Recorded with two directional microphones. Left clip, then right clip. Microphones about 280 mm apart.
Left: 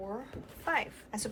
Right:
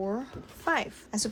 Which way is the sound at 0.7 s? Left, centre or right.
Centre.